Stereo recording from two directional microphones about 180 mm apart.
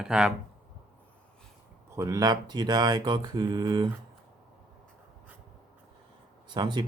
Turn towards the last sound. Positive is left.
turn(degrees=-25)  # may be behind; listen again after turning